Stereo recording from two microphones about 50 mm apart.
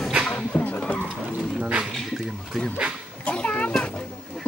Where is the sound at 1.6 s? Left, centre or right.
Right.